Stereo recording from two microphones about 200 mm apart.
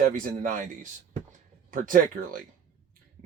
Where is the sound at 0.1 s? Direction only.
40° right (ahead or behind).